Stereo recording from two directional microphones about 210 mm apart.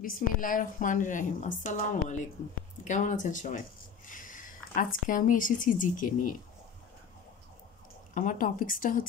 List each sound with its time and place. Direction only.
0.0 s a woman's voice: 40° left (ahead or behind)
4.1 s a sound: 40° left (ahead or behind)
5.0 s a woman's voice: 40° left (ahead or behind)
8.1 s a woman's voice: 40° left (ahead or behind)